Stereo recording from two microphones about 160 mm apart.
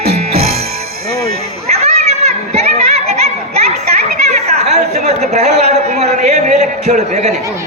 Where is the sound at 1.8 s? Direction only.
45° right (ahead or behind).